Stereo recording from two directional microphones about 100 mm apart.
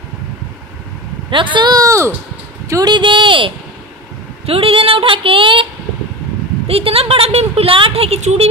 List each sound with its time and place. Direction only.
1.3 s speech: 55° right (ahead or behind)
1.8 s speech: 30° right (ahead or behind)
2.7 s speech: 45° right (ahead or behind)
6.7 s a woman's voice: 75° right (ahead or behind); by 8.5 s 90° right